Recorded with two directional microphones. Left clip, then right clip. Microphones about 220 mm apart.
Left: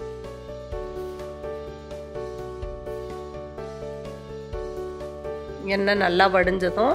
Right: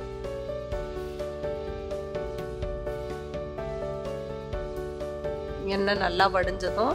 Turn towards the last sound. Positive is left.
turn(degrees=10)  # may be behind; listen again after turning